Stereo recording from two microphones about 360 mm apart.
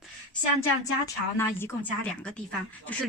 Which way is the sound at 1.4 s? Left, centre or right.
Centre.